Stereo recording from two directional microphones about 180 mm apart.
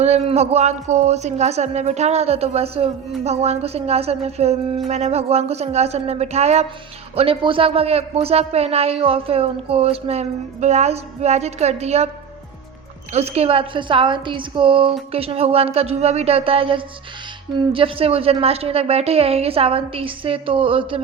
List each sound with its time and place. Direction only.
0.0 s a woman's voice: 35° right (ahead or behind)
13.1 s a woman's voice: 35° right (ahead or behind)